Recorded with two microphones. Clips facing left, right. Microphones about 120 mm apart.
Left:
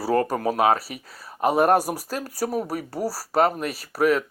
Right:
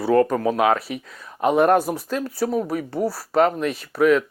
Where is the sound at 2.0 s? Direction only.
40° left (ahead or behind).